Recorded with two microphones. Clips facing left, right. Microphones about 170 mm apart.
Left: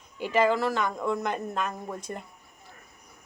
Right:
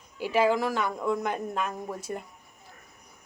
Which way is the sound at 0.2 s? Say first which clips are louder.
Even; 10° right (ahead or behind).